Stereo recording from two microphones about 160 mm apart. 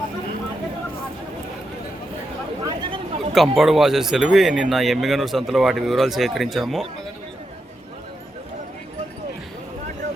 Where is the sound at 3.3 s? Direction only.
Centre (ahead or behind).